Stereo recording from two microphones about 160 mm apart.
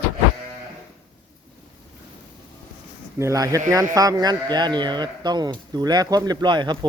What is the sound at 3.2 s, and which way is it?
Speech, 20° right (ahead or behind).